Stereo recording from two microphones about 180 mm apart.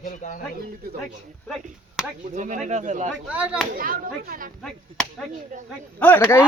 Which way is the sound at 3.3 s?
10° right (ahead or behind).